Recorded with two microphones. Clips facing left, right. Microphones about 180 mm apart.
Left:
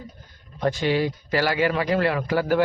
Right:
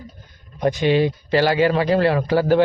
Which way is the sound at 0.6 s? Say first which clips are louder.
Right 5 dB; 20° right (ahead or behind).